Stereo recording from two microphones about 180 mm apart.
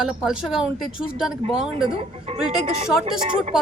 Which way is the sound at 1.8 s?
30° right (ahead or behind).